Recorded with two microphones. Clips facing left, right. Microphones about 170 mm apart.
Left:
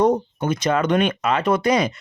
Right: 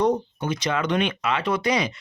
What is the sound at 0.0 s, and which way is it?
Speech, 50° left (ahead or behind).